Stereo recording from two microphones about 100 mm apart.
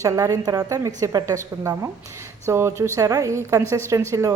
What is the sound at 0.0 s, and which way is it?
A woman's voice, 35° right (ahead or behind).